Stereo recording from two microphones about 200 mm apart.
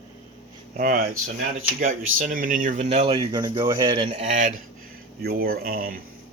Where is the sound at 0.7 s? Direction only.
45° right (ahead or behind).